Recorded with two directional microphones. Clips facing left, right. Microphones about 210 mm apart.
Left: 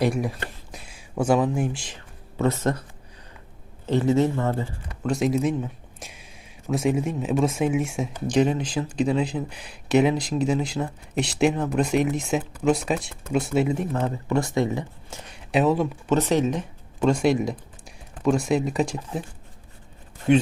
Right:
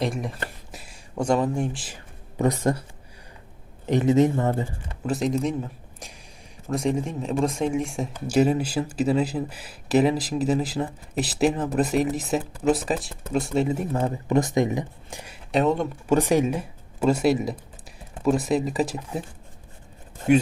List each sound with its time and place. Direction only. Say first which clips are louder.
0.0 s speech: left 4 dB; centre (ahead or behind)
2.4 s speech: right 1 dB; 15° right (ahead or behind)
3.8 s speech: right 1 dB; 15° right (ahead or behind)
5.0 s speech: left 2 dB; centre (ahead or behind)
13.9 s speech: right 2 dB; 15° right (ahead or behind)
15.5 s speech: left 1 dB; centre (ahead or behind)
16.0 s speech: right 2 dB; 10° right (ahead or behind)